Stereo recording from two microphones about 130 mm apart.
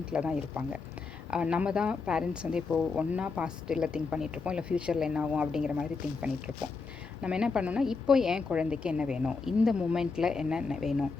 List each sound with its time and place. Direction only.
0.0 s a woman's voice: 5° right (ahead or behind)